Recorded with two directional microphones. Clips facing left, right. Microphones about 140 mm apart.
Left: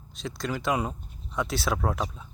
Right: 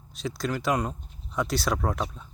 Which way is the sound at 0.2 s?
Centre (ahead or behind).